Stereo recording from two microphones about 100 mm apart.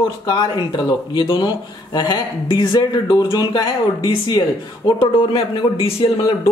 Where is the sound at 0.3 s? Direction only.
45° left (ahead or behind).